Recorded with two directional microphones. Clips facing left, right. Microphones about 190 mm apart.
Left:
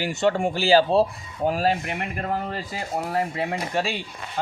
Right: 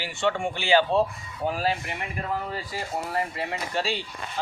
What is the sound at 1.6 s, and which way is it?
Speech, 45° left (ahead or behind).